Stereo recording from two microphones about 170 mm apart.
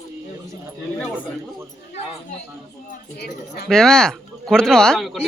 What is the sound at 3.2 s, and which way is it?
Speech, 70° left (ahead or behind).